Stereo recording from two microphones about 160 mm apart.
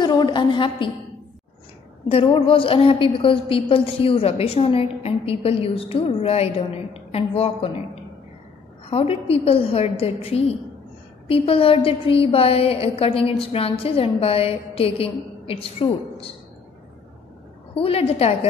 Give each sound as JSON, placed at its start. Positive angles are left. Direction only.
{"t": 0.0, "sound": "a woman's voice", "side_deg": 25}
{"t": 2.0, "sound": "a woman's voice", "side_deg": 35}
{"t": 17.7, "sound": "a woman's voice", "side_deg": 35}